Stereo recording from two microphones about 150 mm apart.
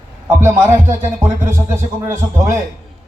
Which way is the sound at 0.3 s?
15° right (ahead or behind).